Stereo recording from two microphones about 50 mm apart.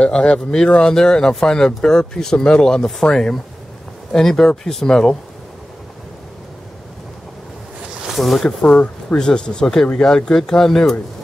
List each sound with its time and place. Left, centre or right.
0.0 s speech: centre
8.2 s speech: centre
8.6 s speech: centre